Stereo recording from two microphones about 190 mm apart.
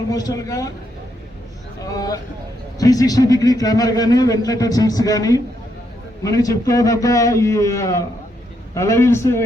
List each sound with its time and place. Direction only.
0.1 s a man's voice: 20° left (ahead or behind)
1.8 s a sound: 20° left (ahead or behind)
2.7 s a man's voice: 20° left (ahead or behind)